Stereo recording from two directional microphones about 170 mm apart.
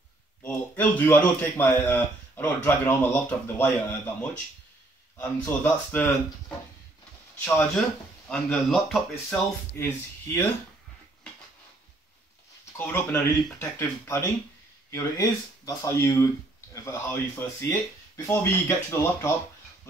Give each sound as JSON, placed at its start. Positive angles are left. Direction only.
{"t": 0.4, "sound": "a man's voice", "side_deg": 15}
{"t": 7.4, "sound": "a man's voice", "side_deg": 10}
{"t": 9.8, "sound": "a man's voice", "side_deg": 15}
{"t": 12.7, "sound": "a man's voice", "side_deg": 15}